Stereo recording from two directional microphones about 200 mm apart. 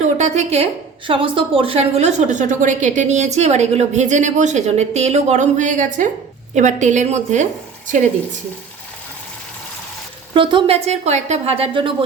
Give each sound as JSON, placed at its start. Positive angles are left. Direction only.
{"t": 0.0, "sound": "a woman's voice", "side_deg": -35}
{"t": 10.3, "sound": "a woman's voice", "side_deg": -25}